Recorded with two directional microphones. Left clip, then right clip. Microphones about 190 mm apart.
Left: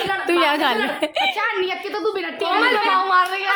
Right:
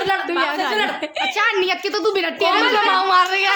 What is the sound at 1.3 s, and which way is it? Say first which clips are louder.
A woman's voice: right 4 dB; 50° right (ahead or behind).